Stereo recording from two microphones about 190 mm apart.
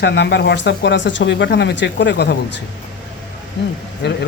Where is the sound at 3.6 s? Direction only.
65° left (ahead or behind).